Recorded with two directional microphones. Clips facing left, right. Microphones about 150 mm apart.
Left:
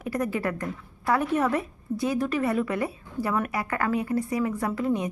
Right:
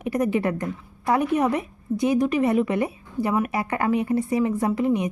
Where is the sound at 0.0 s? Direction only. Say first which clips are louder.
Right 5 dB; 20° right (ahead or behind).